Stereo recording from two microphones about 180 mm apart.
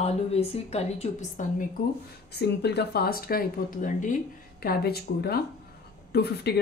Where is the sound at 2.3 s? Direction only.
65° left (ahead or behind); by 4.2 s 45° left (ahead or behind).